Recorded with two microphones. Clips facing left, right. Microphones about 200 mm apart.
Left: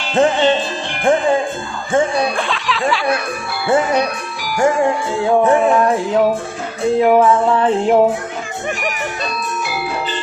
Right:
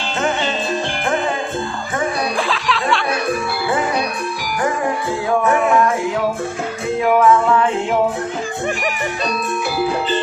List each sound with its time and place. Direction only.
0.2 s music: 30° left (ahead or behind)
1.9 s music: 25° left (ahead or behind)
2.5 s music: centre (ahead or behind)
4.6 s music: 25° left (ahead or behind)
7.0 s music: 30° left (ahead or behind)